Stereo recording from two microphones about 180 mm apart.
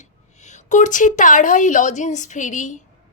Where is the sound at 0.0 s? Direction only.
40° left (ahead or behind).